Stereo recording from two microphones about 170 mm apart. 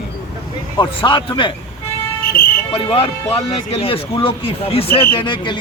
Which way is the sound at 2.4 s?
55° left (ahead or behind).